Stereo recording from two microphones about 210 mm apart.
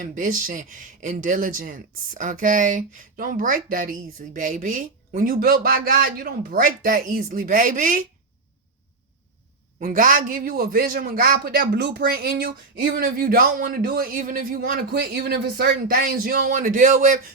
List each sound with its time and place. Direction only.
0.0 s speech: 40° right (ahead or behind)
9.8 s a man's voice: 40° right (ahead or behind)